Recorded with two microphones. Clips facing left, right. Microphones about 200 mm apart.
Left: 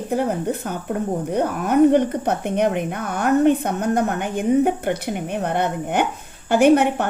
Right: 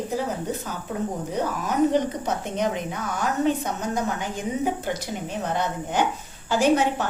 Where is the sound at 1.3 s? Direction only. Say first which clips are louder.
Left 9 dB; 60° left (ahead or behind).